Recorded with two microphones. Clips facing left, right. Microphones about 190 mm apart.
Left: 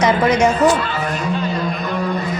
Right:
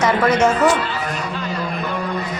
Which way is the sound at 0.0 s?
15° left (ahead or behind).